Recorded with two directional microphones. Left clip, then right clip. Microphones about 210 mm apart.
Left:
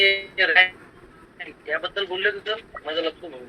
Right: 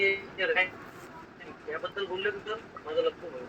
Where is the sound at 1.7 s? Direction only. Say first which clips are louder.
Left 8 dB; 45° left (ahead or behind).